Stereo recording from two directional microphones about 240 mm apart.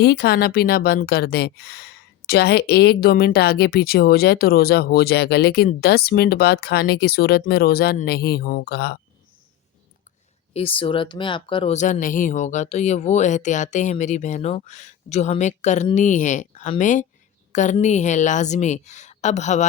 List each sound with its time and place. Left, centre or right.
0.0 s a woman's voice: left
10.5 s speech: left